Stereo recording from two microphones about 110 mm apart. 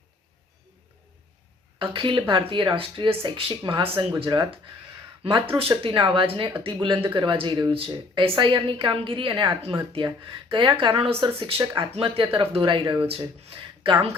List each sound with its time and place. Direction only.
1.8 s a woman's voice: 55° right (ahead or behind)
5.5 s a woman's voice: 60° right (ahead or behind)
11.6 s speech: 40° right (ahead or behind)
11.9 s speech: 55° right (ahead or behind)
12.8 s a woman's voice: 45° right (ahead or behind)
13.1 s speech: 60° right (ahead or behind)